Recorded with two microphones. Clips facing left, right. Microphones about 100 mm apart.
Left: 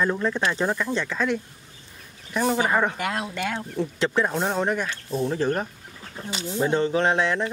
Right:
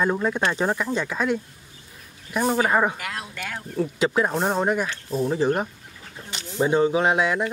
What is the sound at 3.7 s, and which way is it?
Speech, 10° right (ahead or behind).